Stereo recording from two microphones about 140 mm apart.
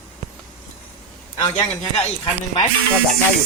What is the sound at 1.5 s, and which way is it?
Speech, 55° left (ahead or behind).